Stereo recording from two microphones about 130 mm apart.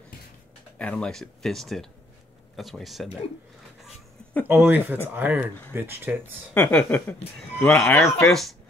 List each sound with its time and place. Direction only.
0.7 s speech: 10° left (ahead or behind)
4.5 s speech: 15° right (ahead or behind)
6.5 s speech: 10° left (ahead or behind)
8.3 s speech: centre (ahead or behind)